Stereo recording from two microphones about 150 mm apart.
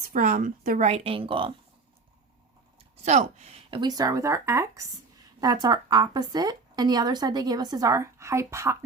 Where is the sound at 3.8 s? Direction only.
25° right (ahead or behind).